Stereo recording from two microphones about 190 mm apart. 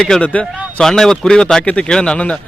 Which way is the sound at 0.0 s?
5° left (ahead or behind).